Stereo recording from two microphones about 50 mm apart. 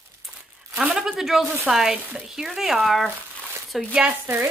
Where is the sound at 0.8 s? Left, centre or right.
Centre.